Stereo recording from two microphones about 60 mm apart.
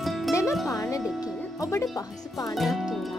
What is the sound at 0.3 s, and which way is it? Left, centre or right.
Music, left.